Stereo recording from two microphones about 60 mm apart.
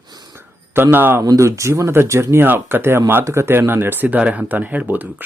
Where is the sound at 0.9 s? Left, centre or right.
Right.